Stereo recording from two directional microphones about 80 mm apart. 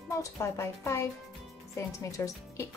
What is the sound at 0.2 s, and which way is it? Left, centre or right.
A woman's voice, left.